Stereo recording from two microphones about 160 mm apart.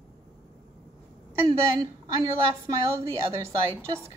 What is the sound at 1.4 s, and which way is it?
Speech, 25° right (ahead or behind).